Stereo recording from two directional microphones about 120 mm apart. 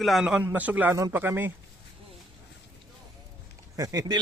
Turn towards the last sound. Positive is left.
turn(degrees=-35)  # may be behind; listen again after turning